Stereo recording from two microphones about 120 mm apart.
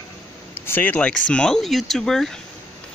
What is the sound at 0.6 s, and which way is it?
Speech, 20° left (ahead or behind).